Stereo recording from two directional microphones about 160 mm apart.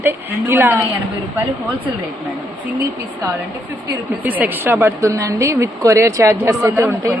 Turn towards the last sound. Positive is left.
turn(degrees=-15)  # may be behind; listen again after turning